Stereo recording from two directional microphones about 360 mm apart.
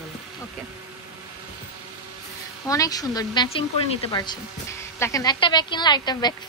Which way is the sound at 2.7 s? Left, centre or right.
Centre.